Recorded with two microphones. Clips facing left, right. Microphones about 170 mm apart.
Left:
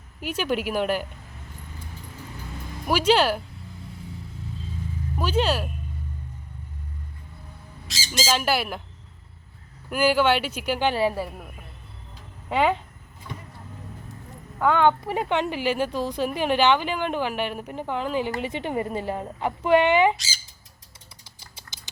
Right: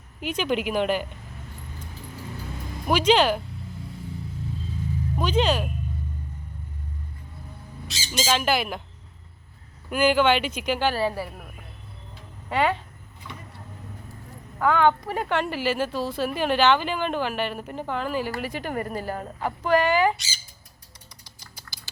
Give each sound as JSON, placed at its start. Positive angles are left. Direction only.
{"t": 0.2, "sound": "speech", "side_deg": 5}
{"t": 2.8, "sound": "speech", "side_deg": 10}
{"t": 5.1, "sound": "speech", "side_deg": 10}
{"t": 7.9, "sound": "speech", "side_deg": 90}
{"t": 8.2, "sound": "speech", "side_deg": 5}
{"t": 9.9, "sound": "speech", "side_deg": 10}
{"t": 11.0, "sound": "speech", "side_deg": 0}
{"t": 12.5, "sound": "speech", "side_deg": 15}
{"t": 15.2, "sound": "speech", "side_deg": 15}
{"t": 20.1, "sound": "speech", "side_deg": 90}
{"t": 21.2, "sound": "typing", "side_deg": 25}